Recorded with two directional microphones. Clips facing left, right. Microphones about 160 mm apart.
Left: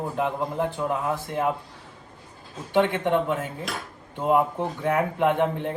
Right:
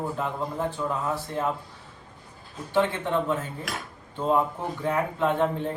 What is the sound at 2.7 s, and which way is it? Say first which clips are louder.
Speech: left 3 dB; 15° left (ahead or behind).